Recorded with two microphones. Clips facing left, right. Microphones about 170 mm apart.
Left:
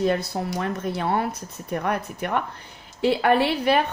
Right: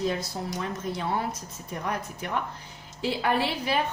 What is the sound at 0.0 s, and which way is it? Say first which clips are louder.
A woman's voice: left 6 dB; 60° left (ahead or behind).